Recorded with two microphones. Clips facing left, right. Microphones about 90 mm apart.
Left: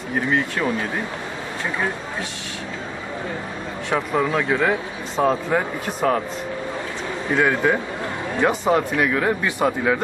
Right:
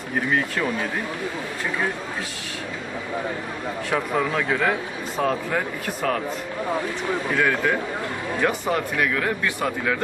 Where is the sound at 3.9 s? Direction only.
10° left (ahead or behind).